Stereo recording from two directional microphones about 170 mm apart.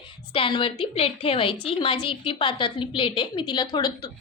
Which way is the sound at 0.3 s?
30° left (ahead or behind).